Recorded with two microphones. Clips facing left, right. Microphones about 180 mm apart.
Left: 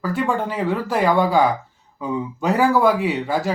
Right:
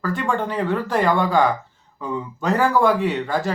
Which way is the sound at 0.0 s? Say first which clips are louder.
Left 1 dB; 10° left (ahead or behind).